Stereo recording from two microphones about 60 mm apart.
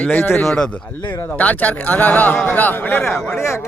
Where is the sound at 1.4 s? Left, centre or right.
Left.